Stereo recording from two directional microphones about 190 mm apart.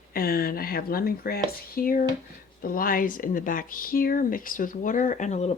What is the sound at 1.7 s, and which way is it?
Speech, 50° left (ahead or behind).